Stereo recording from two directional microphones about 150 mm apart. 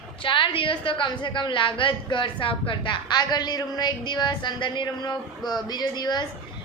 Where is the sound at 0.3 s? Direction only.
35° left (ahead or behind).